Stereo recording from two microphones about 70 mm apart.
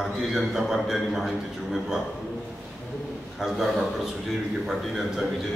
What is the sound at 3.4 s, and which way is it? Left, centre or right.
A man's voice, centre.